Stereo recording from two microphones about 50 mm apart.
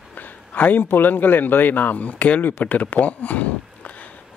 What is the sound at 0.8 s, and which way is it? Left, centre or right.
Speech, left.